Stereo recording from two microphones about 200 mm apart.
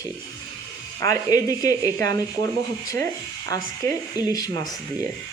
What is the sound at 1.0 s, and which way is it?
Speech, 15° left (ahead or behind).